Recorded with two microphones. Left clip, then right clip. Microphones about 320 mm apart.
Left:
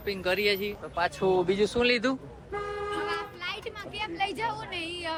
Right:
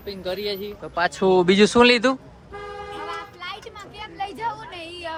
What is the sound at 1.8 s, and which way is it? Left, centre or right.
A woman's voice, centre.